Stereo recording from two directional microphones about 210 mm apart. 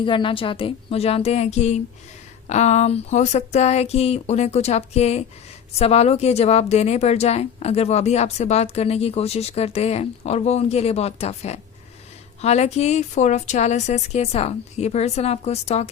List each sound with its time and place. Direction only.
0.0 s speech: 25° left (ahead or behind)